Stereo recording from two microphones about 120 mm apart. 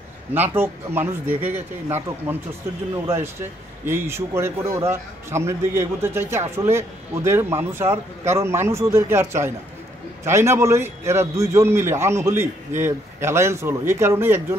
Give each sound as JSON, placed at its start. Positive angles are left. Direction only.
{"t": 0.3, "sound": "a man's voice", "side_deg": -15}